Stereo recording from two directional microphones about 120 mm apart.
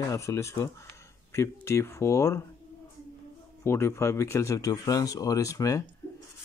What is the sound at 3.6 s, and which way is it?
Speech, 20° left (ahead or behind).